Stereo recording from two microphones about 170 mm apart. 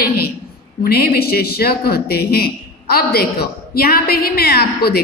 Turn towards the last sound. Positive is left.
turn(degrees=65)  # may be behind; listen again after turning